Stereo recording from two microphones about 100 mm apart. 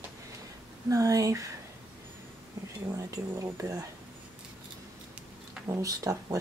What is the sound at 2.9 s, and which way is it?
Speech, 30° right (ahead or behind).